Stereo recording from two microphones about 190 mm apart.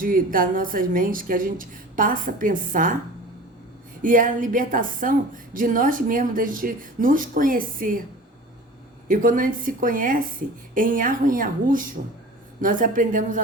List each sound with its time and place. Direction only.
0.0 s a woman's voice: 45° right (ahead or behind)
4.0 s a woman's voice: 45° right (ahead or behind)
9.0 s a woman's voice: 45° right (ahead or behind)